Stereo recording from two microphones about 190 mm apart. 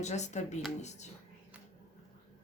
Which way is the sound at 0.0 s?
35° left (ahead or behind).